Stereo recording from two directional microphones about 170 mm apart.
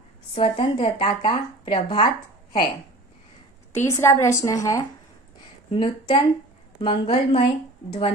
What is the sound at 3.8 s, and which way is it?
A woman's voice, 15° left (ahead or behind).